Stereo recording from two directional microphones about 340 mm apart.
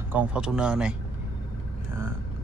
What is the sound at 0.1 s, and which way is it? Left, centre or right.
Speech, centre.